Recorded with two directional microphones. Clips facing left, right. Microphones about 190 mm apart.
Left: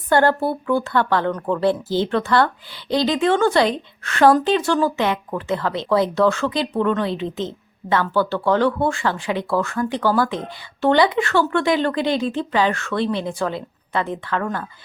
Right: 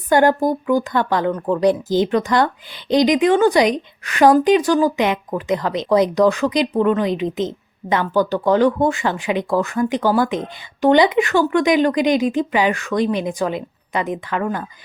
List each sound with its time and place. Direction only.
0.1 s speech: 15° right (ahead or behind)